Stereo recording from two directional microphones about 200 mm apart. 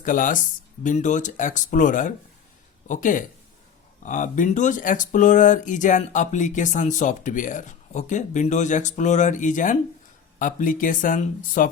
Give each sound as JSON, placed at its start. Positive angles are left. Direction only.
{"t": 0.0, "sound": "speech", "side_deg": 40}